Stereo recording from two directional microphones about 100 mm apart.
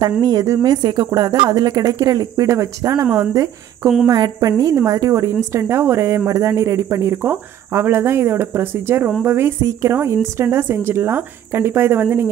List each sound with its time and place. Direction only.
0.2 s a woman's voice: 35° right (ahead or behind)
0.7 s a woman's voice: 45° right (ahead or behind); by 12.3 s 20° right (ahead or behind)